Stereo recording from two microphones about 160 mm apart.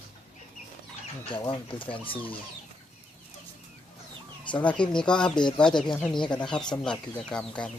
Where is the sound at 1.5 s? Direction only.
30° left (ahead or behind).